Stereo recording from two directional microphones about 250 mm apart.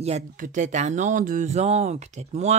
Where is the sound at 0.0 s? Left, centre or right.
Right.